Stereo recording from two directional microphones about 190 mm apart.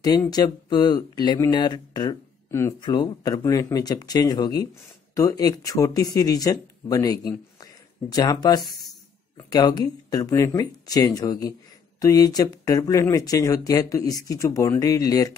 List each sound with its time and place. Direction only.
0.0 s speech: 20° left (ahead or behind)